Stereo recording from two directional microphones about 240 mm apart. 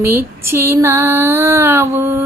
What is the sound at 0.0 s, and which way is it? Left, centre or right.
Female singing, centre.